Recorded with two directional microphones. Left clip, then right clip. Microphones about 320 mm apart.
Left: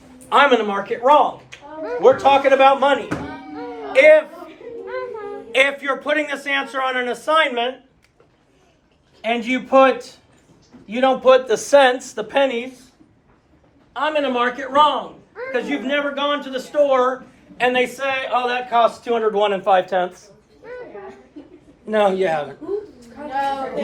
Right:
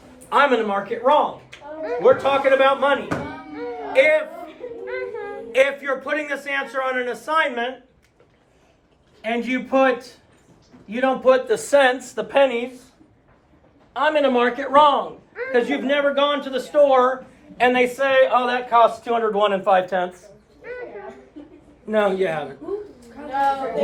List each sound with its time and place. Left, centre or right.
0.3 s a man's voice: centre
5.5 s a man's voice: centre
9.2 s a man's voice: centre
13.9 s a man's voice: right; by 20.2 s centre
21.8 s a man's voice: left